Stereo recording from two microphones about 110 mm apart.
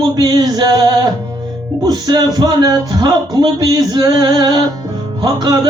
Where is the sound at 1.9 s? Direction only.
40° right (ahead or behind).